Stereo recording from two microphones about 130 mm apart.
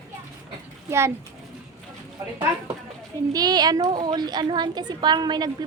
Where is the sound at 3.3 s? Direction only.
30° right (ahead or behind).